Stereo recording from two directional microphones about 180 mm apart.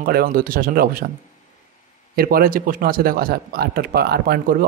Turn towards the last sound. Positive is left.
turn(degrees=-55)  # may be behind; listen again after turning